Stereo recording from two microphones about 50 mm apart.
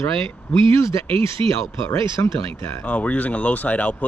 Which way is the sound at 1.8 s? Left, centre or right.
Left.